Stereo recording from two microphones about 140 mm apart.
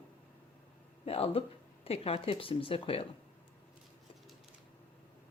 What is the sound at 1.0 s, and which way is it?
Speech, 45° left (ahead or behind).